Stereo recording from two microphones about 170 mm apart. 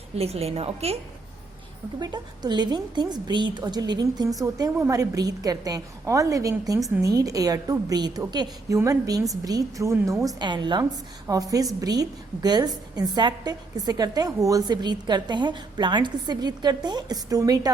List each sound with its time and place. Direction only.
0.2 s a woman's voice: 35° right (ahead or behind)
2.0 s a woman's voice: 25° right (ahead or behind)